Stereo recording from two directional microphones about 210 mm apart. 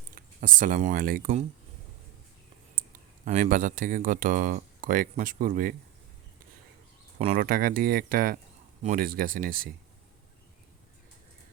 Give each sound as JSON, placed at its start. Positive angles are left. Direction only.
{"t": 0.1, "sound": "speech", "side_deg": -40}
{"t": 3.2, "sound": "speech", "side_deg": -35}
{"t": 7.2, "sound": "speech", "side_deg": -35}